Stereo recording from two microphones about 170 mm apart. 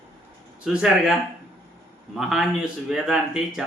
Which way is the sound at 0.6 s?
5° right (ahead or behind).